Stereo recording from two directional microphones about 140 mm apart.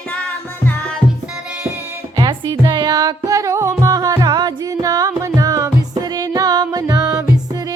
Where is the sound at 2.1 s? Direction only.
30° right (ahead or behind).